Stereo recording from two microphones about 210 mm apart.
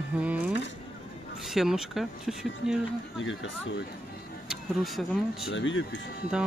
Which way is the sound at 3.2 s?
65° left (ahead or behind).